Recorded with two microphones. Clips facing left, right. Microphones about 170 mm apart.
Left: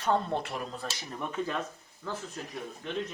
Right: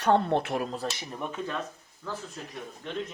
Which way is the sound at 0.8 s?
Centre (ahead or behind).